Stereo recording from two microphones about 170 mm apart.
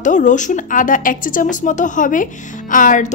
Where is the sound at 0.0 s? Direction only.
45° left (ahead or behind).